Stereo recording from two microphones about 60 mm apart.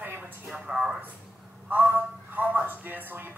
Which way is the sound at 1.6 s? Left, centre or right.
Right.